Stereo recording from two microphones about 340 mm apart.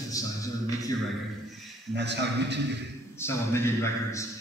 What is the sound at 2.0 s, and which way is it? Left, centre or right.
Speech, right.